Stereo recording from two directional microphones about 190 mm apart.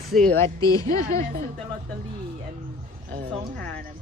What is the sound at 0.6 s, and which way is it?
Speech, 20° left (ahead or behind).